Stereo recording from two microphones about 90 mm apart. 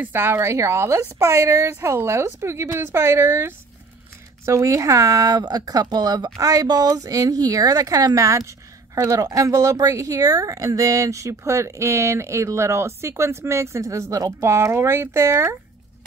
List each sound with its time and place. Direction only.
0.0 s a woman's voice: 25° right (ahead or behind)
4.5 s speech: 40° right (ahead or behind)